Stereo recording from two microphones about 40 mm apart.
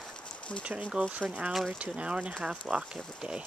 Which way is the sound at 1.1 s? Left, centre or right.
Right.